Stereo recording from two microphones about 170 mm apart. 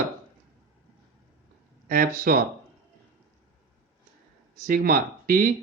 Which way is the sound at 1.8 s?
55° right (ahead or behind).